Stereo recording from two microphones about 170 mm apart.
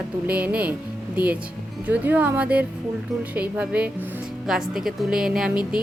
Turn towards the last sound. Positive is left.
turn(degrees=-5)  # may be behind; listen again after turning